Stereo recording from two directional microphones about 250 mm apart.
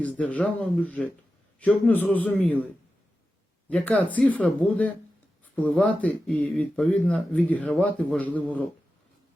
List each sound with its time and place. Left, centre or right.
0.2 s a man's voice: centre
3.7 s speech: centre